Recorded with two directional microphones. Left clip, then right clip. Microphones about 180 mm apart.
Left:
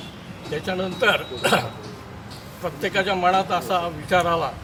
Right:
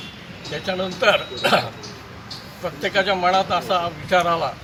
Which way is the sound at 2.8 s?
Centre (ahead or behind).